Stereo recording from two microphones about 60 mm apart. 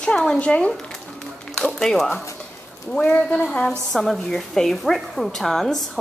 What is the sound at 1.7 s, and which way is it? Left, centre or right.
A woman's voice, centre.